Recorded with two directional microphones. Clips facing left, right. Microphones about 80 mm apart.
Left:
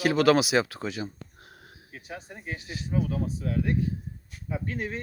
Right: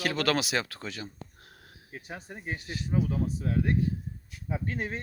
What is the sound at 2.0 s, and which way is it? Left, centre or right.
Speech, right.